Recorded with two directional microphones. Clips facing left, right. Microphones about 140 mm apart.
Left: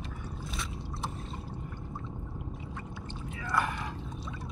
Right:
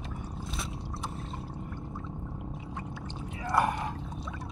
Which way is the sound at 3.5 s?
25° right (ahead or behind).